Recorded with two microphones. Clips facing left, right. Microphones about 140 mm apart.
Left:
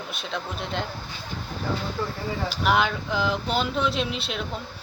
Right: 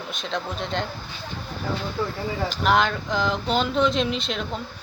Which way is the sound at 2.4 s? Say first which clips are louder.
Right 2 dB; 5° left (ahead or behind).